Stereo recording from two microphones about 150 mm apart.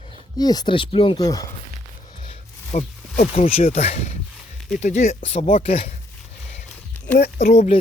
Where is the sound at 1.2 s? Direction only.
25° left (ahead or behind).